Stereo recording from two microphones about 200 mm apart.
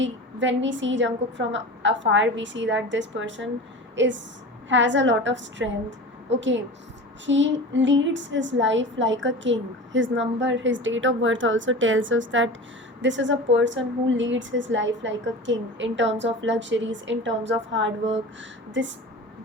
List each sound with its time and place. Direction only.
0.0 s a woman's voice: 65° right (ahead or behind)